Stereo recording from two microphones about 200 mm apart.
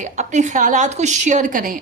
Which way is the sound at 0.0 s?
35° right (ahead or behind).